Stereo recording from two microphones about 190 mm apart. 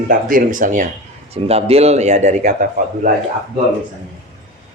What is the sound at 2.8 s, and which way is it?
Speech, 50° right (ahead or behind).